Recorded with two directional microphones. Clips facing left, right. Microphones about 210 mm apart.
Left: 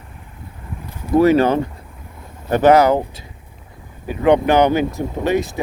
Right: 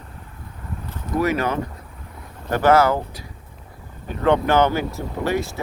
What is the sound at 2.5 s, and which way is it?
Speech, 20° left (ahead or behind).